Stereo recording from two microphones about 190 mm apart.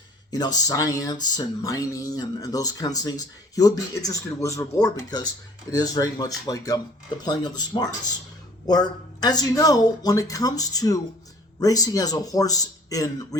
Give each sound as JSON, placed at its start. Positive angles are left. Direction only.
{"t": 0.3, "sound": "speech", "side_deg": 20}